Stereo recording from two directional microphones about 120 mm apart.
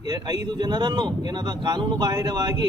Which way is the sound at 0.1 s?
35° right (ahead or behind).